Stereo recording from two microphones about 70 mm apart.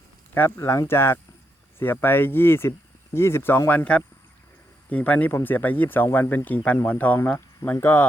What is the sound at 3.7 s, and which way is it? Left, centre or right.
Speech, left.